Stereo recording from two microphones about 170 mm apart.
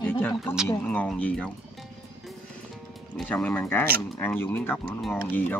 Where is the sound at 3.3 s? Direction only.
10° left (ahead or behind).